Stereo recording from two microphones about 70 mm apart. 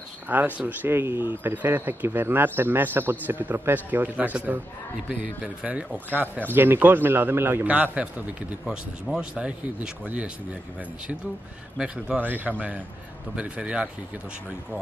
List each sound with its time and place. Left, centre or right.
0.3 s speech: right
5.2 s speech: centre
6.5 s a man's voice: right
7.6 s speech: right
8.6 s speech: centre
12.2 s speech: right